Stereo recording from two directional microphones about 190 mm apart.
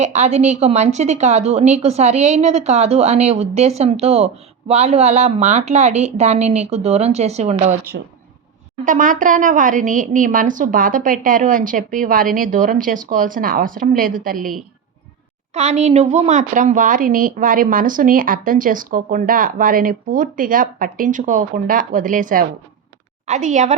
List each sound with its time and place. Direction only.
0.0 s a woman's voice: 35° right (ahead or behind)
8.8 s speech: 45° right (ahead or behind)
15.5 s a woman's voice: 35° right (ahead or behind)